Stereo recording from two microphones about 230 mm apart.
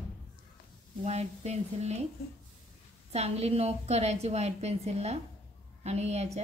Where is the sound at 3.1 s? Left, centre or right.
Right.